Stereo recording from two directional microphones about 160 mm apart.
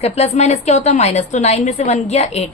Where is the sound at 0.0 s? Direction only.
45° left (ahead or behind).